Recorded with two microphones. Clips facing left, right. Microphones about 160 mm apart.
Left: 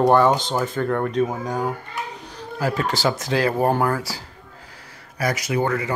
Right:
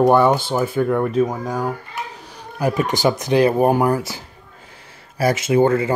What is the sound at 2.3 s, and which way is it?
Speech, 20° right (ahead or behind).